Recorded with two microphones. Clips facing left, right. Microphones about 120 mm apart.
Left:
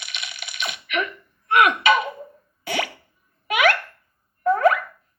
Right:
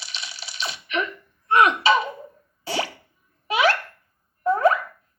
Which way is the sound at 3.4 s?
30° right (ahead or behind).